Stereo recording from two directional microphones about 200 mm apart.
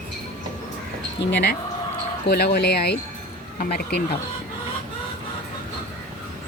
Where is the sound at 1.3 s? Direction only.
55° left (ahead or behind).